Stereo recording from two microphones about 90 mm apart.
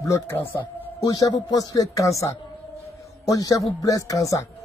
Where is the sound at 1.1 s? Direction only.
45° left (ahead or behind).